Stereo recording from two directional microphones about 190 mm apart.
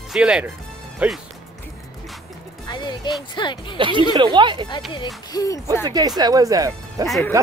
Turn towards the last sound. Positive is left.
turn(degrees=0)  # may be behind; listen again after turning